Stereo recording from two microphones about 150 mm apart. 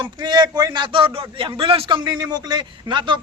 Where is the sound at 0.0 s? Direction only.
30° right (ahead or behind).